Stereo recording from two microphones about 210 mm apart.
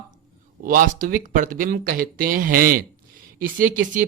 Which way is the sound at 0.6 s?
40° right (ahead or behind).